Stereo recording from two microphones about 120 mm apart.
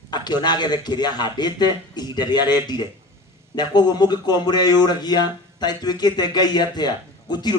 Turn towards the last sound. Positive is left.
turn(degrees=35)  # may be behind; listen again after turning